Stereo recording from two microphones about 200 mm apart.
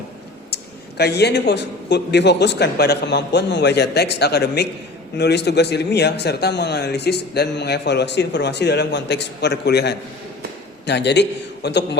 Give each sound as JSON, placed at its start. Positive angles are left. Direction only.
{"t": 0.5, "sound": "a man's voice", "side_deg": 55}